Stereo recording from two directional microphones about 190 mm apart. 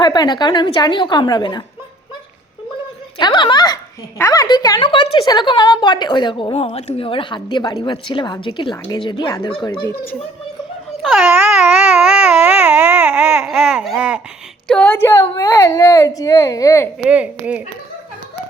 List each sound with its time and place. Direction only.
0.0 s a woman's voice: 20° left (ahead or behind)
3.2 s a woman's voice: 20° left (ahead or behind)
11.0 s a sound: 5° right (ahead or behind)
14.7 s speech: 10° left (ahead or behind)
17.0 s speech: 5° right (ahead or behind)